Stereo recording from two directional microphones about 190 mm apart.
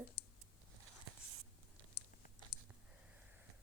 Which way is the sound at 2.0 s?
60° left (ahead or behind).